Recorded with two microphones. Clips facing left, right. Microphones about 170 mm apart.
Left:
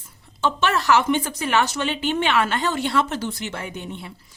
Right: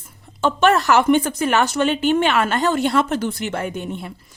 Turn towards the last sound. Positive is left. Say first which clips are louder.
# right 6 dB
turn(degrees=-50)  # may be behind; listen again after turning